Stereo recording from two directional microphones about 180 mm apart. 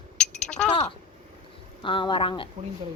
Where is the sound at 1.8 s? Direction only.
25° left (ahead or behind).